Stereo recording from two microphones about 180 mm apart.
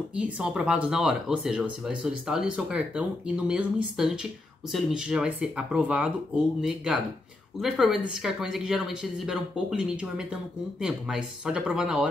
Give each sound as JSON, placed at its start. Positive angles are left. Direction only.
{"t": 0.1, "sound": "speech", "side_deg": -5}